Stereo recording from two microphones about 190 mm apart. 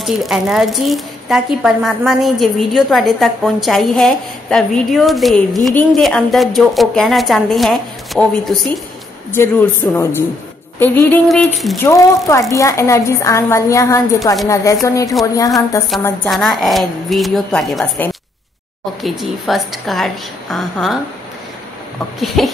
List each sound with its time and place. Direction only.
0.0 s a woman's voice: centre (ahead or behind)
9.3 s a woman's voice: 10° left (ahead or behind)
11.2 s a woman's voice: centre (ahead or behind)
11.8 s a woman's voice: 15° left (ahead or behind)
16.3 s a woman's voice: centre (ahead or behind)
22.2 s a woman's voice: centre (ahead or behind)